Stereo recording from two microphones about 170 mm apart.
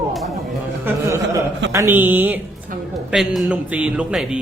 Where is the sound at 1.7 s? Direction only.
15° right (ahead or behind).